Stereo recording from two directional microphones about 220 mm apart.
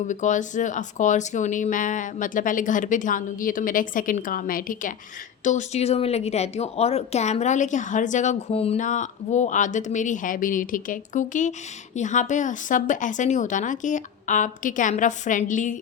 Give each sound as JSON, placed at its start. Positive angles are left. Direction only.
{"t": 0.1, "sound": "speech", "side_deg": 35}